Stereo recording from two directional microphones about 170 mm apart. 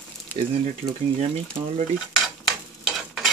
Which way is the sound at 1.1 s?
35° right (ahead or behind).